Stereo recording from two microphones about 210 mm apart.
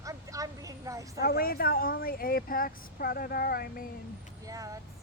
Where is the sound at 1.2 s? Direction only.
45° left (ahead or behind).